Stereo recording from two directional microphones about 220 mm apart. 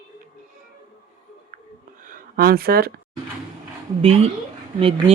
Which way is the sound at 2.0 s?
40° right (ahead or behind).